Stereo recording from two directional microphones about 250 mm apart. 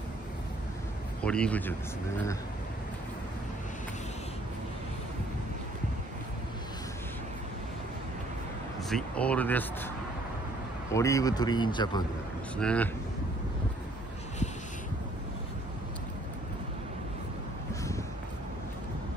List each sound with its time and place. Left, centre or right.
1.2 s speech: centre
8.8 s speech: centre
10.9 s speech: centre
12.5 s speech: centre